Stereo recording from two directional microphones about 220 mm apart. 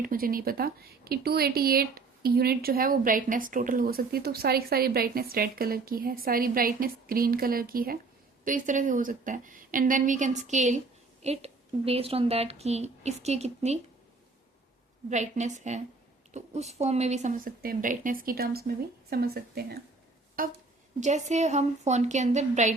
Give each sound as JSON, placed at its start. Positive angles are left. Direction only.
{"t": 0.0, "sound": "a woman's voice", "side_deg": -40}
{"t": 15.1, "sound": "a woman's voice", "side_deg": -30}